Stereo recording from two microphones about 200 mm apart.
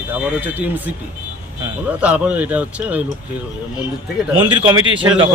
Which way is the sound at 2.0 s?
5° right (ahead or behind).